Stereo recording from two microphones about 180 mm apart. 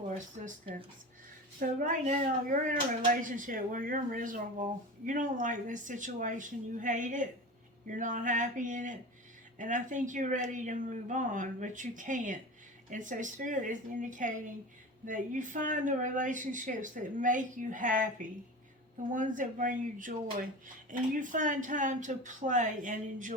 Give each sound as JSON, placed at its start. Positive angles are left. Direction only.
{"t": 0.1, "sound": "speech", "side_deg": -35}